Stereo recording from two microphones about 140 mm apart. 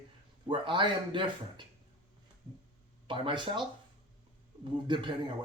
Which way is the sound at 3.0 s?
35° right (ahead or behind).